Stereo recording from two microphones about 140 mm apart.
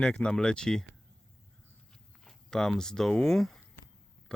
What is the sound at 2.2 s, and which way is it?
Speech, 5° left (ahead or behind).